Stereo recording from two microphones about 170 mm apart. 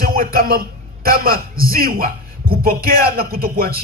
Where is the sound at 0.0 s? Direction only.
60° right (ahead or behind).